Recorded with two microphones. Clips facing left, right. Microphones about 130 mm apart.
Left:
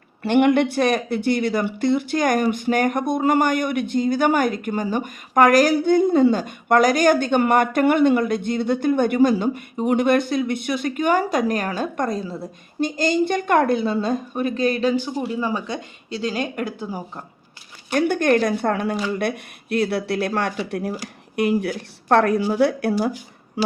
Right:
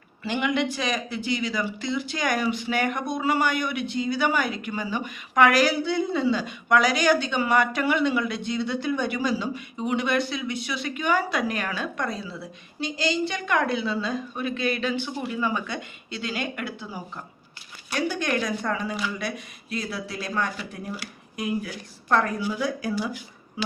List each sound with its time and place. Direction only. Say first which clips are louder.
0.2 s speech: left 9 dB; 60° left (ahead or behind); by 16.7 s 40° left (ahead or behind)
17.9 s speech: left 8 dB; 55° left (ahead or behind); by 23.7 s 70° left (ahead or behind)